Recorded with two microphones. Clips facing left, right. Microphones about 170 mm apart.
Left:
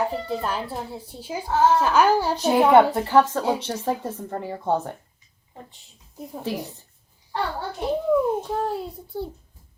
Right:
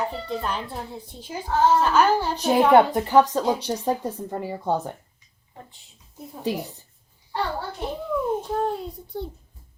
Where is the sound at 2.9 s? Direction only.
15° right (ahead or behind).